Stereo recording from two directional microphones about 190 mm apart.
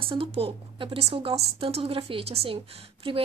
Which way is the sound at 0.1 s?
30° right (ahead or behind).